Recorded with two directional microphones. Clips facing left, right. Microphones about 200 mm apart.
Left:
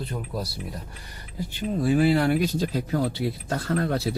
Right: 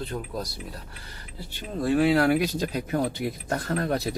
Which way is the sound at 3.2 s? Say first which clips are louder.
Left 1 dB; 15° right (ahead or behind).